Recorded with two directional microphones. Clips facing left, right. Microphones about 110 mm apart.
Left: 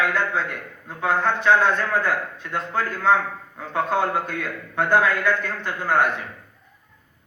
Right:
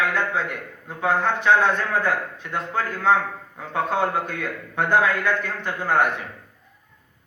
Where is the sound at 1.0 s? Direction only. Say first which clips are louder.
Even; 20° right (ahead or behind).